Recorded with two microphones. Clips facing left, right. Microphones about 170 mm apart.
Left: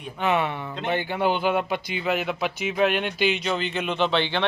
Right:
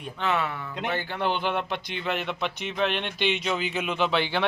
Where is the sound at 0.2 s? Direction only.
20° left (ahead or behind).